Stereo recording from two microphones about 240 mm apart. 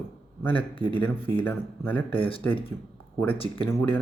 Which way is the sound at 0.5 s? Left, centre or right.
Left.